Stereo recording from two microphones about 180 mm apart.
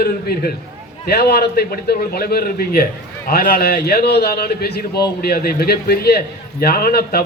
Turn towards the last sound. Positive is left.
turn(degrees=60)  # may be behind; listen again after turning